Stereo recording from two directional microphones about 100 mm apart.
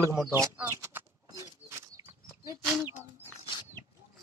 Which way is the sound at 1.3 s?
30° right (ahead or behind).